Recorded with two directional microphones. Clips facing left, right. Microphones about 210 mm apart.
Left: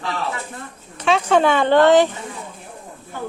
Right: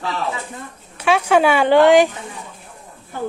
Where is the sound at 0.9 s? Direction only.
10° right (ahead or behind).